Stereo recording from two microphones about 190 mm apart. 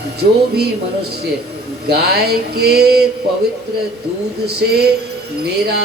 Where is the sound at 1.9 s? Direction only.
55° right (ahead or behind).